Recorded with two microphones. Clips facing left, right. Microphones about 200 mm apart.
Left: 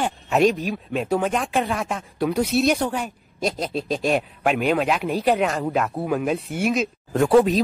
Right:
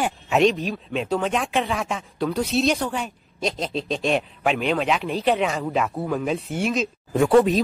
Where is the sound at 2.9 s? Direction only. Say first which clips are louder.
Left 1 dB; 5° left (ahead or behind).